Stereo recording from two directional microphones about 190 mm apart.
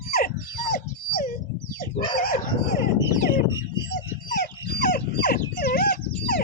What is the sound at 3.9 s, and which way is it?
Dog, 55° left (ahead or behind).